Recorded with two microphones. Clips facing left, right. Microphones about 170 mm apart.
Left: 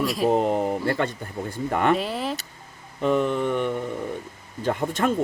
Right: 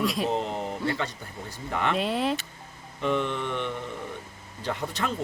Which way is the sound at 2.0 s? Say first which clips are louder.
Right 1 dB; centre (ahead or behind).